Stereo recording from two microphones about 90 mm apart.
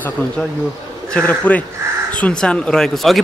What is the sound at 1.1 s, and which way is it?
A man's voice, 15° left (ahead or behind).